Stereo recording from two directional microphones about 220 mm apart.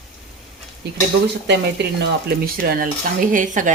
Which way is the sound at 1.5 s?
50° right (ahead or behind).